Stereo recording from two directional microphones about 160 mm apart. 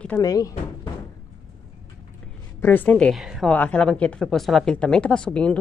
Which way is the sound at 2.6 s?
10° left (ahead or behind).